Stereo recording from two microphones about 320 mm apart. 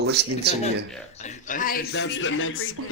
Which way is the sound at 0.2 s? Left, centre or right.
Right.